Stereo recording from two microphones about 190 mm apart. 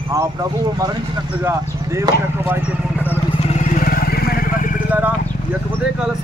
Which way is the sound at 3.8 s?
50° left (ahead or behind).